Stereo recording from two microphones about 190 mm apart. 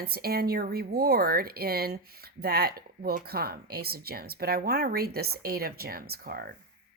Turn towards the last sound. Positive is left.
turn(degrees=-50)  # may be behind; listen again after turning